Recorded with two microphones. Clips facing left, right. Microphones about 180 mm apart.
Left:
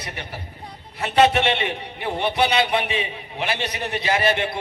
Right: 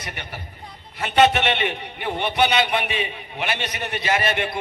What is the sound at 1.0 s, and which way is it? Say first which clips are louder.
A man's voice: even; centre (ahead or behind).